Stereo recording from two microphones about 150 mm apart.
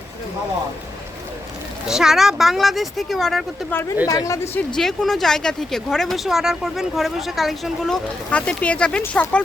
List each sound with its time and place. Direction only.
1.9 s speech: 5° right (ahead or behind)
3.7 s speech: 15° left (ahead or behind)
4.8 s speech: centre (ahead or behind)